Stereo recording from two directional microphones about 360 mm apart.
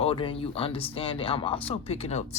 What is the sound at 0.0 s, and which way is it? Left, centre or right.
Speech, centre.